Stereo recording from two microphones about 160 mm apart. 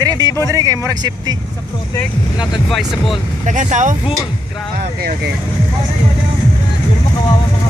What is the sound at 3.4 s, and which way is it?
Speech, 50° right (ahead or behind).